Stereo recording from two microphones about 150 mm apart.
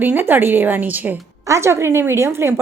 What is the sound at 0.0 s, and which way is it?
A woman's voice, 15° right (ahead or behind).